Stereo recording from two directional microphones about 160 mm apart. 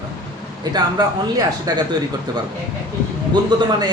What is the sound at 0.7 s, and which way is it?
Speech, 25° right (ahead or behind).